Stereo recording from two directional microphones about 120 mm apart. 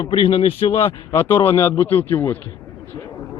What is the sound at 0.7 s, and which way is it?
A man's voice, 25° left (ahead or behind).